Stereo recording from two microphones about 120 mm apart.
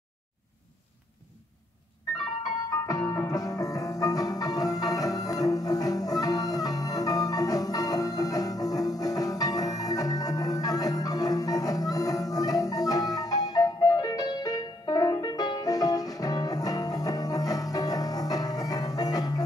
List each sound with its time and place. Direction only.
2.9 s music: 30° left (ahead or behind)